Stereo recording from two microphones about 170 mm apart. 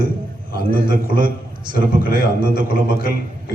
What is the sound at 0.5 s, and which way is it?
A man's voice, 55° right (ahead or behind).